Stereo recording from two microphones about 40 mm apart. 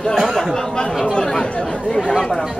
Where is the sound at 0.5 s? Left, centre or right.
Centre.